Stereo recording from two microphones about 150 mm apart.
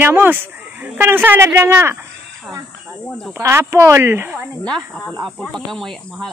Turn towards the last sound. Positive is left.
turn(degrees=5)  # may be behind; listen again after turning